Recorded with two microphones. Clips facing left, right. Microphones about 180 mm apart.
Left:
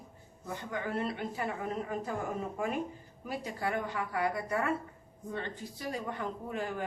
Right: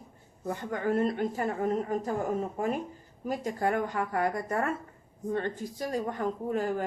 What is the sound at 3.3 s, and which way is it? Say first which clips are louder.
A woman's voice: right 6 dB; 45° right (ahead or behind).